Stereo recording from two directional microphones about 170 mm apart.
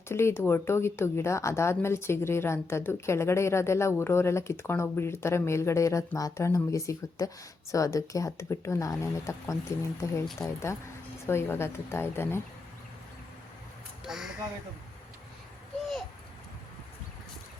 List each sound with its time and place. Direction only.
0.1 s speech: 15° left (ahead or behind)
11.3 s speech: 15° left (ahead or behind)
14.0 s speech: 5° right (ahead or behind)